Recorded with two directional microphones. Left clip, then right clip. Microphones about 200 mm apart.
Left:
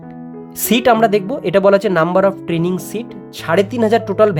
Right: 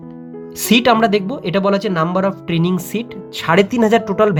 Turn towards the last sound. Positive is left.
turn(degrees=10)  # may be behind; listen again after turning